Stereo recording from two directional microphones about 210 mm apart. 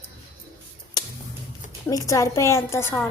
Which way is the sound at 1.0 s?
20° left (ahead or behind).